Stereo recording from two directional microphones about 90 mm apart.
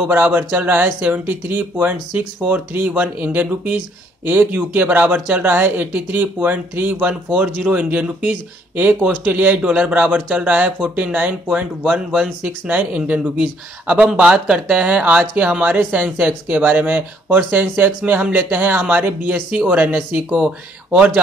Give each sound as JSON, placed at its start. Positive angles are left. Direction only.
{"t": 0.0, "sound": "speech", "side_deg": -20}